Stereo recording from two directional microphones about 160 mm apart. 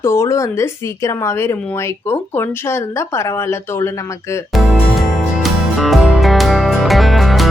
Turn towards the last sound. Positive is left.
turn(degrees=0)  # may be behind; listen again after turning